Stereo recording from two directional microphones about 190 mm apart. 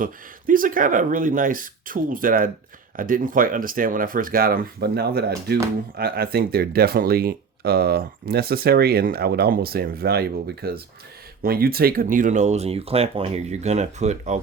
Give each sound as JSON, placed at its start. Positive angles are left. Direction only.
{"t": 0.0, "sound": "speech", "side_deg": -45}